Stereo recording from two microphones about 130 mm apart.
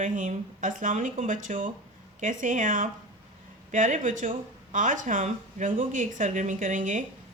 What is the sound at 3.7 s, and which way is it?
Speech, 80° right.